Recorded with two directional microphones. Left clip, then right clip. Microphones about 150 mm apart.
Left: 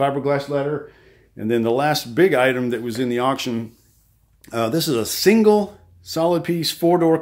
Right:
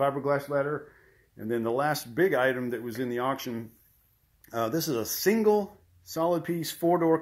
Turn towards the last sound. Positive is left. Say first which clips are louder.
# left 8 dB
turn(degrees=15)  # may be behind; listen again after turning